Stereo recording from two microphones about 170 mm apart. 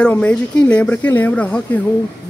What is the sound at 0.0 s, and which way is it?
Speech, 5° left (ahead or behind).